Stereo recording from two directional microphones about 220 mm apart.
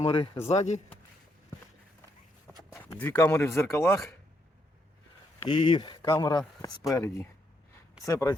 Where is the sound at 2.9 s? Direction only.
10° left (ahead or behind).